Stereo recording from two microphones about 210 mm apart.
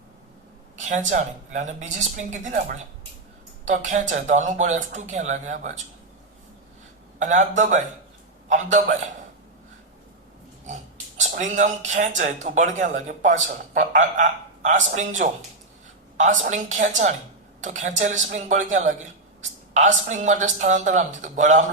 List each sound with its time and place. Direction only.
0.8 s speech: 35° right (ahead or behind)
7.2 s speech: 35° right (ahead or behind)
11.2 s speech: 35° right (ahead or behind)